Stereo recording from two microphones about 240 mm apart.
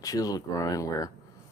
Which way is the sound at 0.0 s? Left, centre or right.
Centre.